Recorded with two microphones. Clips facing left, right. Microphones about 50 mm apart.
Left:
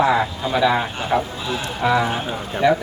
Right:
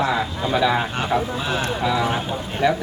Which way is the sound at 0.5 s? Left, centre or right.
Centre.